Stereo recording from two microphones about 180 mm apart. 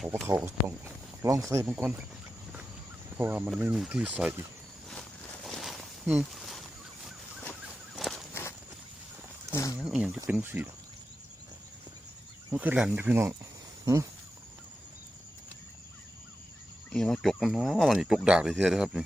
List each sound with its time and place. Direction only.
0.3 s speech: 10° right (ahead or behind)
3.2 s speech: 10° right (ahead or behind)
4.9 s walk: centre (ahead or behind)
6.1 s a sound: 5° right (ahead or behind)
7.9 s walk: centre (ahead or behind)
8.3 s walk: 10° left (ahead or behind)
9.5 s a sound: 15° left (ahead or behind)
9.7 s a sound: 5° right (ahead or behind)
10.2 s speech: 10° right (ahead or behind)
12.5 s speech: 5° right (ahead or behind)
16.9 s speech: 5° left (ahead or behind)